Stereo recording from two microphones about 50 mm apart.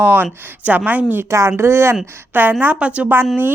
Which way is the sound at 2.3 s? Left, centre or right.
Right.